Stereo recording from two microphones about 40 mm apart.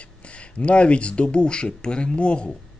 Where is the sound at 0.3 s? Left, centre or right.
Left.